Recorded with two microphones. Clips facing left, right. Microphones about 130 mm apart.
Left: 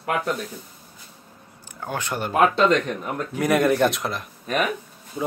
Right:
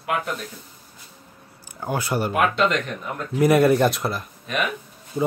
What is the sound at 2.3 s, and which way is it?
Speech, 30° left (ahead or behind).